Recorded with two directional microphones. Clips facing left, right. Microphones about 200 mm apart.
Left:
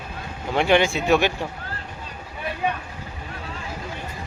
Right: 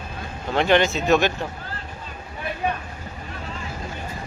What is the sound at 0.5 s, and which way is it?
Speech, 10° left (ahead or behind).